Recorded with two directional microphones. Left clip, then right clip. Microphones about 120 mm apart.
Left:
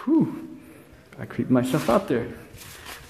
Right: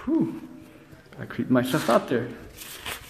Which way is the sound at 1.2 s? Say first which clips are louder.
Left 2 dB; 35° left (ahead or behind).